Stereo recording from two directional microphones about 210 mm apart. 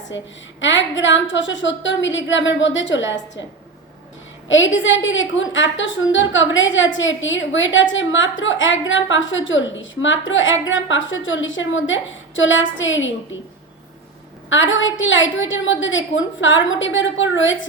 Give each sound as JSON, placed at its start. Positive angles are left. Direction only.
{"t": 0.1, "sound": "a woman's voice", "side_deg": 60}
{"t": 4.4, "sound": "a woman's voice", "side_deg": 65}
{"t": 14.5, "sound": "a woman's voice", "side_deg": 65}